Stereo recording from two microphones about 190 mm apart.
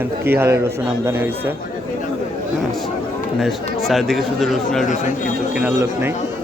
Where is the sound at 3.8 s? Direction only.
Centre (ahead or behind).